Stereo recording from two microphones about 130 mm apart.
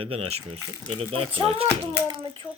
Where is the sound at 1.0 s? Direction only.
45° right (ahead or behind).